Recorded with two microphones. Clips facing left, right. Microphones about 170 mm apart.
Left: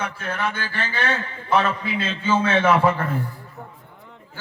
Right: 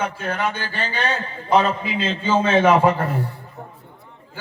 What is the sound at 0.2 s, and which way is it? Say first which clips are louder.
A man's voice: right 2 dB; 15° right (ahead or behind).